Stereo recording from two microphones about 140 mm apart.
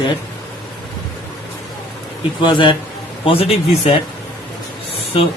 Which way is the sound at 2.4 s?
35° left (ahead or behind).